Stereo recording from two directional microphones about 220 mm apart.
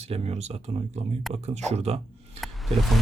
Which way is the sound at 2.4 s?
Centre (ahead or behind).